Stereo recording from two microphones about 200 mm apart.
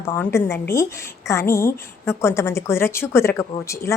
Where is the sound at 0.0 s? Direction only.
10° left (ahead or behind).